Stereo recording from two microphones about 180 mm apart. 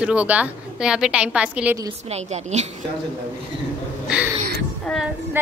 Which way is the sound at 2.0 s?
35° right (ahead or behind).